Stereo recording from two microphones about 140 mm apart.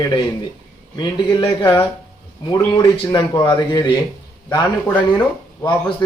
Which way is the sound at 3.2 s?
30° left (ahead or behind).